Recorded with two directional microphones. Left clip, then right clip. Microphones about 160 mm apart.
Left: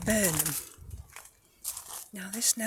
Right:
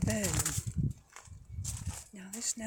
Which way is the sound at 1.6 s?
10° right (ahead or behind).